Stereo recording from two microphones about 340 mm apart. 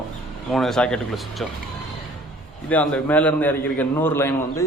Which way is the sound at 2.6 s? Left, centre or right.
Centre.